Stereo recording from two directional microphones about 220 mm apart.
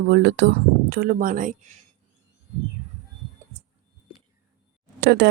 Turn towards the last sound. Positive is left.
turn(degrees=-50)  # may be behind; listen again after turning